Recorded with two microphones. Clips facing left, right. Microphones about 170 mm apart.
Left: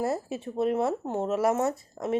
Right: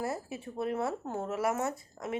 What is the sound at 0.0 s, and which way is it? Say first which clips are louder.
Speech: left 6 dB; 25° left (ahead or behind).